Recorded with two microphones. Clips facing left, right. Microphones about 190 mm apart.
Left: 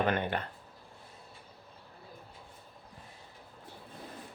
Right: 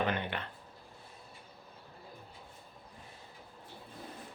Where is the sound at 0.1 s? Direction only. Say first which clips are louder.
Left 4 dB; 45° left (ahead or behind).